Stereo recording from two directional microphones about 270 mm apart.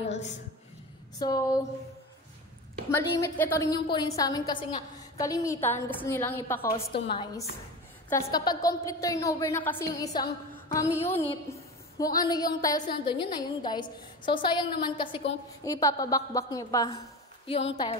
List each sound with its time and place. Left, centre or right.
1.2 s a woman's voice: centre
2.9 s a woman's voice: centre